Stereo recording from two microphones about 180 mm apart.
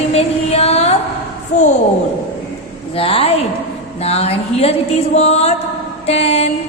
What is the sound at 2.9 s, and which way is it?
Music, 30° left (ahead or behind).